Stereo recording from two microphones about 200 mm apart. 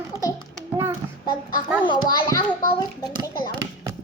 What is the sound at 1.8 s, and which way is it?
A child's voice, 20° left (ahead or behind).